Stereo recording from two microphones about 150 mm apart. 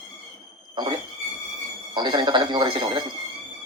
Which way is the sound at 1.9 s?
30° right (ahead or behind).